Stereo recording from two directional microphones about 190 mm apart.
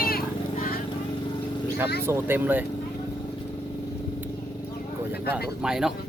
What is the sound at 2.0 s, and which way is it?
Speech, 10° right (ahead or behind).